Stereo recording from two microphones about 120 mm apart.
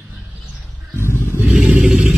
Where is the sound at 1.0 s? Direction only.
20° left (ahead or behind).